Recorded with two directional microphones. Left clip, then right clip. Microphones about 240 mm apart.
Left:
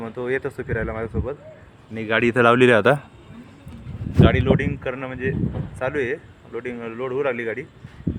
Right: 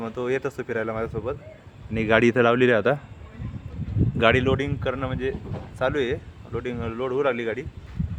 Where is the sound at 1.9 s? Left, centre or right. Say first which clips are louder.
Right 2 dB; right.